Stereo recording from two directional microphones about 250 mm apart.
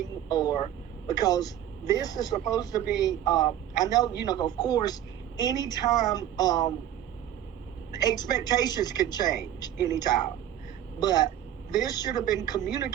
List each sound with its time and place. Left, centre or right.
0.0 s a woman's voice: centre
7.9 s a woman's voice: centre